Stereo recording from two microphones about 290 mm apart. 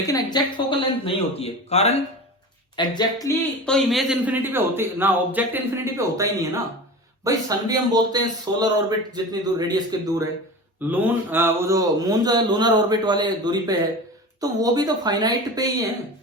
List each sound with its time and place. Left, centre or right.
0.0 s a man's voice: centre